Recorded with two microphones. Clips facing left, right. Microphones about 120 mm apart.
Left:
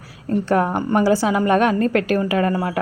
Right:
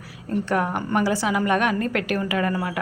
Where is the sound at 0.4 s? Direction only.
35° left (ahead or behind).